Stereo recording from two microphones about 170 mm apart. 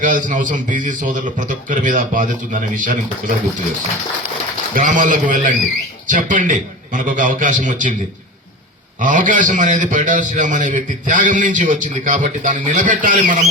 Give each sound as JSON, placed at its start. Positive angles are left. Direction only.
{"t": 0.0, "sound": "a man's voice", "side_deg": -50}
{"t": 4.7, "sound": "a man's voice", "side_deg": -50}
{"t": 9.0, "sound": "a man's voice", "side_deg": -50}